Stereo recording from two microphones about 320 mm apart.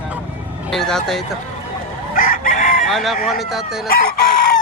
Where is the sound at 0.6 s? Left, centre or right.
Centre.